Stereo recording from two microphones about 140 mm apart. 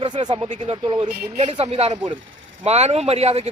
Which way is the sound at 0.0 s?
30° right (ahead or behind).